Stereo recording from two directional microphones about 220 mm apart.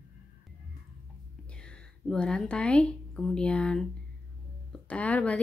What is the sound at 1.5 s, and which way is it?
Speech, 5° left (ahead or behind).